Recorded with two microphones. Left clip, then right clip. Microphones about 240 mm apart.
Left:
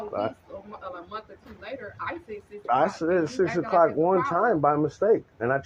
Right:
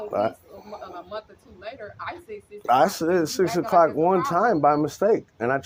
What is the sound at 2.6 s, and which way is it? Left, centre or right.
Speech, right.